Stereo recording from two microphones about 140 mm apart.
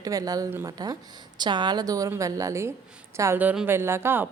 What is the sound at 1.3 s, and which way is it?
A woman's voice, 30° right (ahead or behind).